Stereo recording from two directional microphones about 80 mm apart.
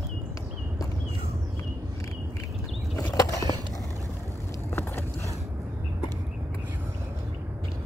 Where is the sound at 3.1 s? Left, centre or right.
Left.